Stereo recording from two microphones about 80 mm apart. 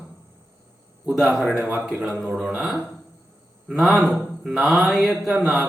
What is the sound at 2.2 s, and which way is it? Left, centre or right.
Speech, centre.